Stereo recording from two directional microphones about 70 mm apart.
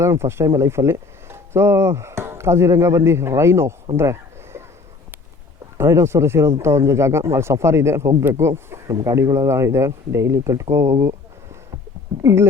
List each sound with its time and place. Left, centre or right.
0.0 s speech: right
5.7 s speech: right
9.1 s speech: right
12.2 s speech: right